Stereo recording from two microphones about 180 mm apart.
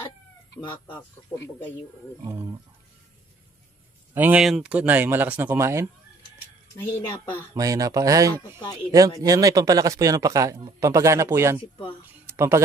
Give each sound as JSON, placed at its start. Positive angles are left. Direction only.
{"t": 0.6, "sound": "speech", "side_deg": 25}
{"t": 2.2, "sound": "speech", "side_deg": -20}
{"t": 4.1, "sound": "speech", "side_deg": -10}
{"t": 6.7, "sound": "speech", "side_deg": 10}
{"t": 7.5, "sound": "a man's voice", "side_deg": -20}
{"t": 8.3, "sound": "speech", "side_deg": 20}
{"t": 9.2, "sound": "a man's voice", "side_deg": -20}